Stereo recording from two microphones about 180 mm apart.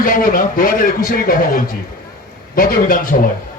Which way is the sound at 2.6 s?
50° left (ahead or behind).